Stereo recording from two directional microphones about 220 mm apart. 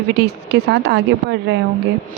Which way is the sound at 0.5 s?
50° right (ahead or behind).